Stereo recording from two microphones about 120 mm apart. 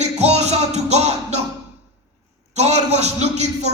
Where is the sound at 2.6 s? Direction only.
65° right (ahead or behind).